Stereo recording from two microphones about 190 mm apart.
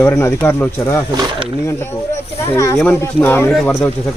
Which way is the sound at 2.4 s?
15° left (ahead or behind).